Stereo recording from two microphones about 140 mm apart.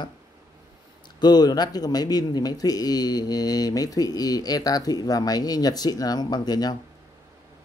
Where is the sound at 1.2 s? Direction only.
30° left (ahead or behind).